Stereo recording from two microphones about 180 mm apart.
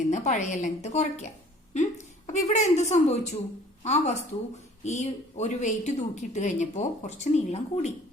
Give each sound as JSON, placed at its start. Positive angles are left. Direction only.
{"t": 0.1, "sound": "speech", "side_deg": 40}